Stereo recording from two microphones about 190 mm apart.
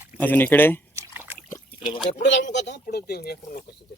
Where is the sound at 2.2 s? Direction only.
70° left (ahead or behind).